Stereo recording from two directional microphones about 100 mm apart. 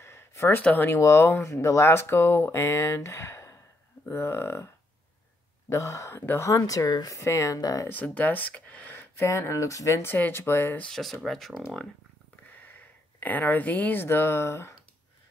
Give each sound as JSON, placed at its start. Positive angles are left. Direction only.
{"t": 0.0, "sound": "speech", "side_deg": 25}
{"t": 5.7, "sound": "speech", "side_deg": 30}
{"t": 7.9, "sound": "speech", "side_deg": 15}
{"t": 9.2, "sound": "speech", "side_deg": 30}
{"t": 10.9, "sound": "speech", "side_deg": 0}
{"t": 13.2, "sound": "speech", "side_deg": 15}